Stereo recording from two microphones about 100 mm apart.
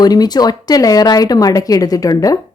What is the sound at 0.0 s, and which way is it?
Speech, 40° left (ahead or behind).